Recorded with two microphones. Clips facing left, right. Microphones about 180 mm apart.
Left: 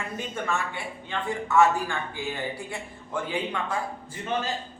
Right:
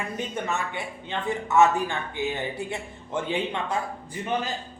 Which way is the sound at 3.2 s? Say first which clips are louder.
Right 2 dB; 25° right (ahead or behind).